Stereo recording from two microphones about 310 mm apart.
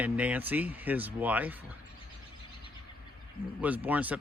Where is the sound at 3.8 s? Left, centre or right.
Centre.